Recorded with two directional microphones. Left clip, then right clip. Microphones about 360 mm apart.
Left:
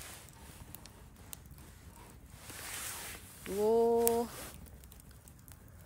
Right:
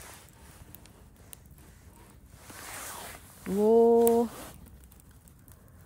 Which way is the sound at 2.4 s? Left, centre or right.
Centre.